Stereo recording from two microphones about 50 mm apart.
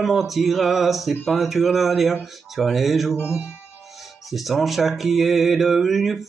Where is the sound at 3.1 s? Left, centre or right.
Left.